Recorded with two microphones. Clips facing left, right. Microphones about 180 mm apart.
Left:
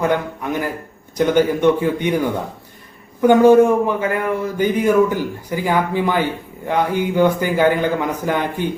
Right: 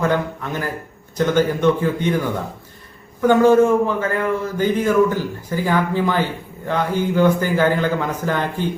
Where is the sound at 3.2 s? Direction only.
15° left (ahead or behind).